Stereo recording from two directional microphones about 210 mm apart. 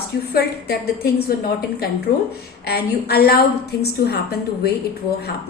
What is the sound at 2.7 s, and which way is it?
A woman's voice, 50° left (ahead or behind).